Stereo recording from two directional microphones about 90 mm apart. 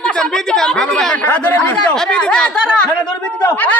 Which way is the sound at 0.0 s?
5° left (ahead or behind).